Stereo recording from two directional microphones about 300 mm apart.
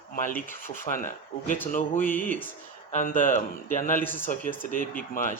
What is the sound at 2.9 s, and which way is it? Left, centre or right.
Speech, left.